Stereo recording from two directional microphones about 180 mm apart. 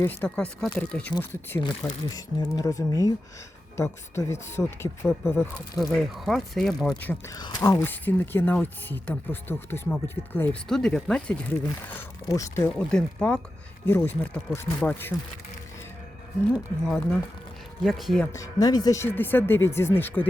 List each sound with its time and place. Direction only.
0.0 s speech: 10° left (ahead or behind)
5.7 s speech: centre (ahead or behind)
7.3 s speech: 25° left (ahead or behind); by 11.3 s 5° left (ahead or behind)
11.9 s speech: 15° left (ahead or behind)
16.8 s speech: 5° left (ahead or behind)
18.3 s speech: 15° left (ahead or behind)